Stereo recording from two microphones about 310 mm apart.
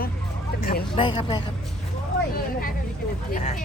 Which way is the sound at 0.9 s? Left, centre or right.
Centre.